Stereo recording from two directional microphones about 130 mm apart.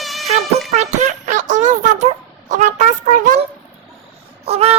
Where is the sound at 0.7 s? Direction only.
65° right (ahead or behind).